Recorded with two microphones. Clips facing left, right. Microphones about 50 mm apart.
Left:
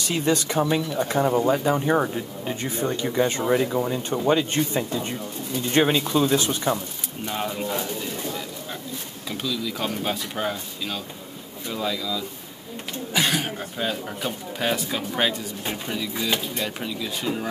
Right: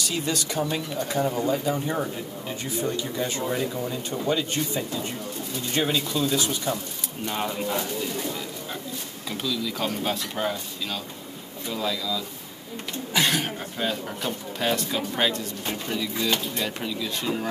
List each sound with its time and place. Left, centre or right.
0.0 s speech: left
7.2 s speech: centre
9.3 s speech: centre